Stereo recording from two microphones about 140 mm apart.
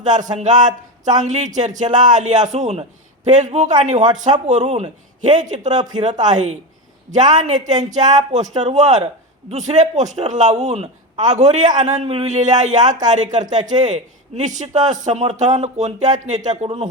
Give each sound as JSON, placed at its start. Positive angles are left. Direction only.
{"t": 0.0, "sound": "a man's voice", "side_deg": -60}
{"t": 5.7, "sound": "speech", "side_deg": -30}
{"t": 6.3, "sound": "a man's voice", "side_deg": -60}